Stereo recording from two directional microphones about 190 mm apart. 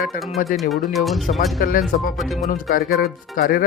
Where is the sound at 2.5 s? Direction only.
50° left (ahead or behind).